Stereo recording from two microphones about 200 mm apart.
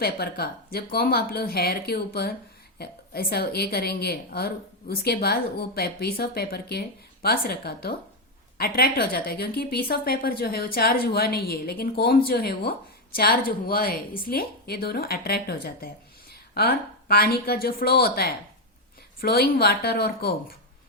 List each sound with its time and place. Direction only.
0.0 s a woman's voice: 50° left (ahead or behind)